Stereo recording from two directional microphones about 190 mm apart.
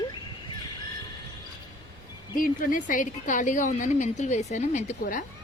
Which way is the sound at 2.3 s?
45° left (ahead or behind).